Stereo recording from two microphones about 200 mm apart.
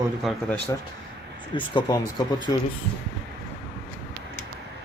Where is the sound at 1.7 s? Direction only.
20° left (ahead or behind).